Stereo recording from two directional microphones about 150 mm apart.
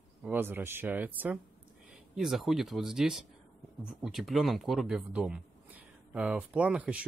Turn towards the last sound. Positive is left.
turn(degrees=-10)  # may be behind; listen again after turning